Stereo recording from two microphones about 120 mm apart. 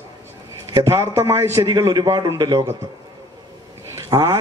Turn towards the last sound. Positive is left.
turn(degrees=-25)  # may be behind; listen again after turning